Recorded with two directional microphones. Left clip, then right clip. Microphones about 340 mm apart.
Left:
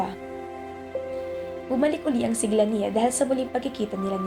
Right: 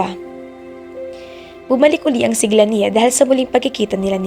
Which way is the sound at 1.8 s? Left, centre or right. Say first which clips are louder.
Right 11 dB; right.